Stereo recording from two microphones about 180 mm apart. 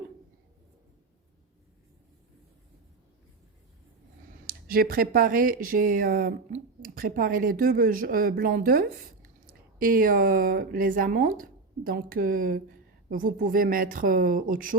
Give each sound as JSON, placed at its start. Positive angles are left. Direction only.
{"t": 4.4, "sound": "speech", "side_deg": -55}